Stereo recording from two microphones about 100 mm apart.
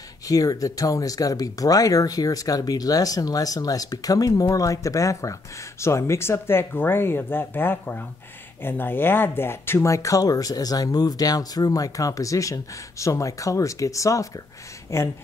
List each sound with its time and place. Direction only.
0.3 s speech: 35° left (ahead or behind)